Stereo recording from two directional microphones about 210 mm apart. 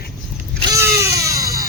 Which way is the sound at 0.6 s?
15° right (ahead or behind).